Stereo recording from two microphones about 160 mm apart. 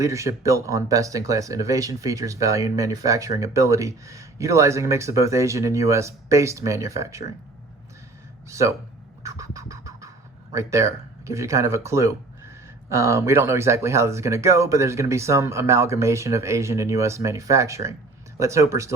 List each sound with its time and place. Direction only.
0.0 s speech: 20° right (ahead or behind)
8.4 s speech: 20° right (ahead or behind)
9.2 s a sound: 20° right (ahead or behind)
10.5 s speech: 20° right (ahead or behind)